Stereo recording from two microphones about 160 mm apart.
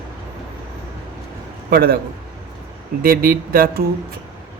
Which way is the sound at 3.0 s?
65° right (ahead or behind).